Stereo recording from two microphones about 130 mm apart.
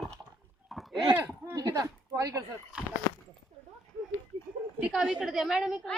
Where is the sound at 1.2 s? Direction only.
25° right (ahead or behind).